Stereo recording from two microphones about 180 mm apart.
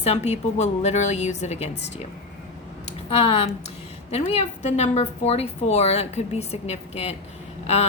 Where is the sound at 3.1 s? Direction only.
30° left (ahead or behind).